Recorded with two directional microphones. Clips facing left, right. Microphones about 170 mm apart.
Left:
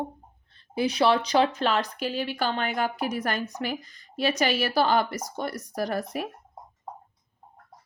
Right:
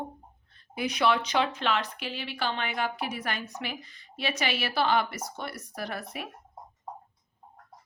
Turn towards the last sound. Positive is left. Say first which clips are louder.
# left 7 dB
turn(degrees=40)  # may be behind; listen again after turning